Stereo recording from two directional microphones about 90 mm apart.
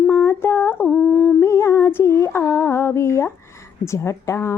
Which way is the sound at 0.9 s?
10° left (ahead or behind).